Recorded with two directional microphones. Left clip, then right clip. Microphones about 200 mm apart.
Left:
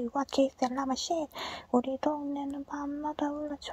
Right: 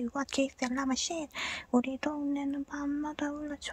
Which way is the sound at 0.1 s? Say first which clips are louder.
Left 6 dB; 20° right (ahead or behind).